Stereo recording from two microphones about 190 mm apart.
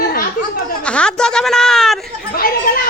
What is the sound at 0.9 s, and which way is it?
Speech, 5° left (ahead or behind).